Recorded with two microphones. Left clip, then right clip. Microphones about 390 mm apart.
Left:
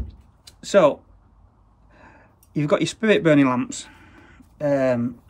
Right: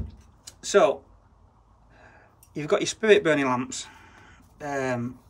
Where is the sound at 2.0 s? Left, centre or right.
Centre.